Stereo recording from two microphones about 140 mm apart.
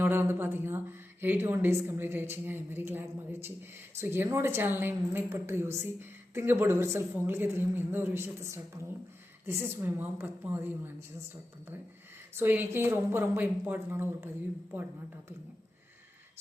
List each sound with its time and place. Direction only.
0.0 s a woman's voice: 15° right (ahead or behind)
4.0 s a woman's voice: 15° right (ahead or behind)
12.3 s a woman's voice: 15° right (ahead or behind)